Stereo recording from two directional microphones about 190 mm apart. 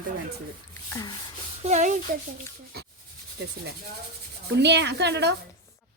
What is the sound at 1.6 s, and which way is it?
Speech, 40° right (ahead or behind).